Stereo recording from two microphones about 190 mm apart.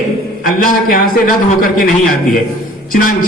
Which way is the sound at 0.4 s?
45° left (ahead or behind).